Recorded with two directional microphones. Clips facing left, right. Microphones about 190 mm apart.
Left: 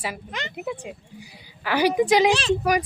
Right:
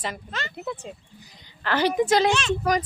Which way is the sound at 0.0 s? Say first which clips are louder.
Left 1 dB; 10° left (ahead or behind).